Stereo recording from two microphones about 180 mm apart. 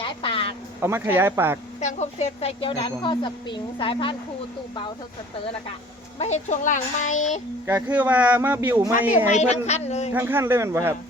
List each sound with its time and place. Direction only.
0.0 s a sound: 25° left (ahead or behind)
0.8 s speech: 15° right (ahead or behind)
1.8 s speech: 40° left (ahead or behind)
6.1 s a child's voice: 40° left (ahead or behind)
7.7 s speech: 10° right (ahead or behind)
9.3 s a child's voice: 40° left (ahead or behind)
10.1 s speech: 10° right (ahead or behind)